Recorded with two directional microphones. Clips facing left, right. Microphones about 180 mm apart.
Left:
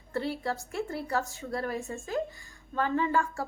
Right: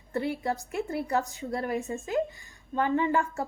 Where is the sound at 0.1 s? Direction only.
20° right (ahead or behind).